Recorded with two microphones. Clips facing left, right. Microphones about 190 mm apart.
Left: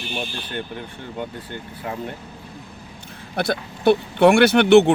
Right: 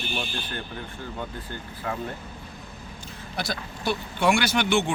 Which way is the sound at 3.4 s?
60° left (ahead or behind).